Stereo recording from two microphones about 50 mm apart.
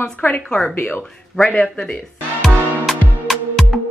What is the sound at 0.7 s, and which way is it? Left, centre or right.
Speech, left.